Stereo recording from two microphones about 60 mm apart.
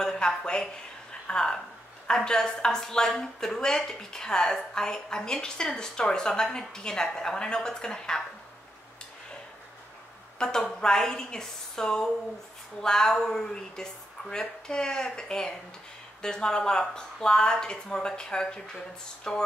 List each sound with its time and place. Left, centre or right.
0.0 s a sound: centre
0.4 s a woman's voice: centre
10.4 s a woman's voice: centre